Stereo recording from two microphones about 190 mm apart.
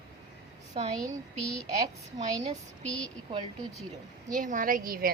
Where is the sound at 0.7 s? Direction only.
25° right (ahead or behind).